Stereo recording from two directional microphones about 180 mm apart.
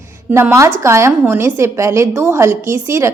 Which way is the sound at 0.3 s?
10° right (ahead or behind).